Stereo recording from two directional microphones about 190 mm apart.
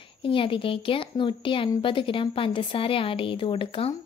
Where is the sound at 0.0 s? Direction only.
25° left (ahead or behind).